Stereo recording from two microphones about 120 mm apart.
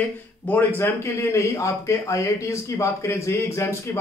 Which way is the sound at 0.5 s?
15° left (ahead or behind).